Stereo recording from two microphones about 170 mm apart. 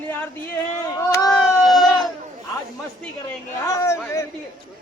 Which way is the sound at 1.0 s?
20° left (ahead or behind).